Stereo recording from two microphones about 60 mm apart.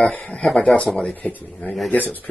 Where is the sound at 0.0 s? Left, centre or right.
Left.